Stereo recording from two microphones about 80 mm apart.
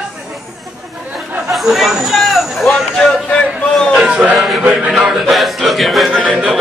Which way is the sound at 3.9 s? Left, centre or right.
Centre.